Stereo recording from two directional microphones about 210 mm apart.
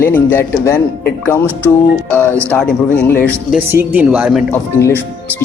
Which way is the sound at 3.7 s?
10° right (ahead or behind).